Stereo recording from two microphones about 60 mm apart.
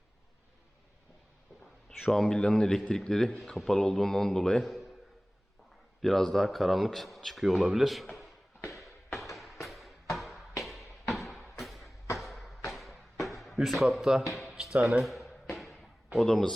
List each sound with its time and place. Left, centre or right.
2.0 s a man's voice: centre
6.0 s speech: centre
8.7 s a sound: centre
9.6 s music: centre
10.6 s a sound: centre
14.5 s music: centre
14.8 s a man's voice: right
15.0 s a sound: centre
16.1 s a man's voice: centre